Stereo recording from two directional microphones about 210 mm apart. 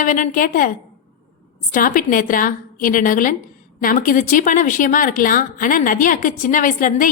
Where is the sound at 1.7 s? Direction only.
40° left (ahead or behind).